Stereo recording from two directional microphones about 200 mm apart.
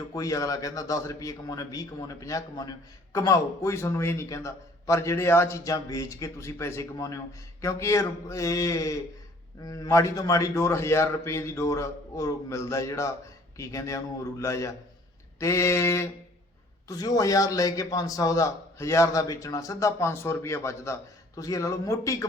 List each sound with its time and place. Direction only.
0.1 s a man's voice: 15° left (ahead or behind)